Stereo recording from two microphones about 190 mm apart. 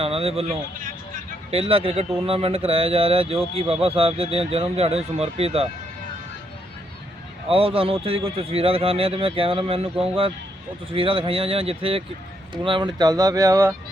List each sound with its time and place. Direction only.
0.0 s speech: 30° right (ahead or behind)
7.4 s speech: 30° right (ahead or behind)